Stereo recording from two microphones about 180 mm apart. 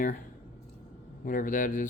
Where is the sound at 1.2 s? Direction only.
50° left (ahead or behind).